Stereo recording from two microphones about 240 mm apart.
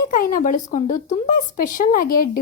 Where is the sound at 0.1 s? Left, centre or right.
Left.